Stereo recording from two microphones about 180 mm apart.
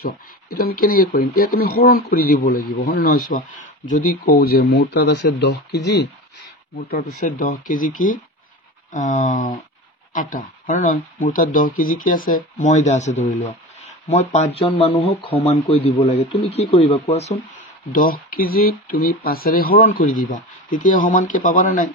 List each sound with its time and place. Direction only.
0.0 s speech: 55° left (ahead or behind)
6.8 s speech: 55° left (ahead or behind); by 17.4 s 35° left (ahead or behind)
17.9 s speech: 55° left (ahead or behind)